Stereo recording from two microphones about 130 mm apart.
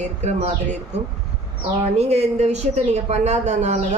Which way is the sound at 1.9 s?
55° right (ahead or behind).